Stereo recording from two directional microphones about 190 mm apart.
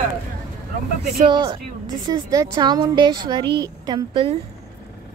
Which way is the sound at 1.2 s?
25° right (ahead or behind).